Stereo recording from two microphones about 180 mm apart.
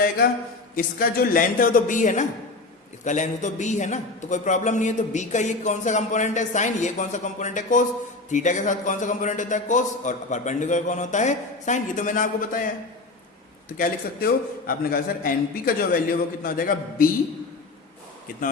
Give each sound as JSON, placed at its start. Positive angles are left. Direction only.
{"t": 0.8, "sound": "a man's voice", "side_deg": 55}
{"t": 13.7, "sound": "a man's voice", "side_deg": 50}